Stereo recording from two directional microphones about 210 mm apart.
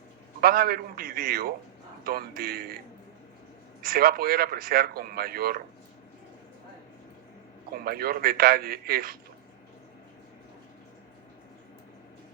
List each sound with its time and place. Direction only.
0.4 s speech: 45° right (ahead or behind)
3.8 s speech: 45° right (ahead or behind)
7.9 s speech: 45° right (ahead or behind)